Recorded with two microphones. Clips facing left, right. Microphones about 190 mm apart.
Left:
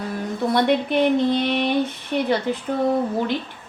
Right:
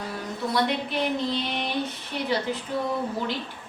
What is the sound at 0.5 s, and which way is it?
A woman's voice, 55° left (ahead or behind).